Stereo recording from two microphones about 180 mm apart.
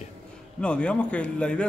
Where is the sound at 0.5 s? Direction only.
5° left (ahead or behind).